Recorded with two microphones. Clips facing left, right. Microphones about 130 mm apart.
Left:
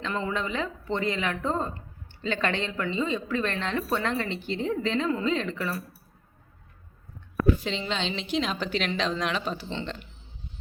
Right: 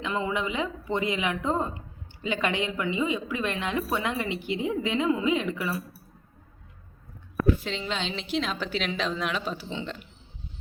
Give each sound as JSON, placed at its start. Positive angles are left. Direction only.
{"t": 0.0, "sound": "a woman's voice", "side_deg": -15}
{"t": 7.6, "sound": "a woman's voice", "side_deg": 0}